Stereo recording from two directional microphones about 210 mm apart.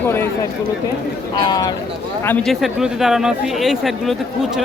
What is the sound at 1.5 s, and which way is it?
Speech, 20° left (ahead or behind).